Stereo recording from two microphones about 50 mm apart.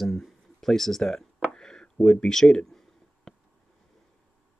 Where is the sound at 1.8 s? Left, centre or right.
Centre.